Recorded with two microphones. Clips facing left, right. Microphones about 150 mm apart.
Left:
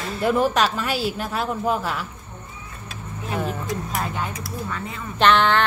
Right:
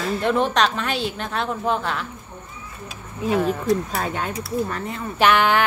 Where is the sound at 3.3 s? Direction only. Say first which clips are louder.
Right 6 dB; centre (ahead or behind).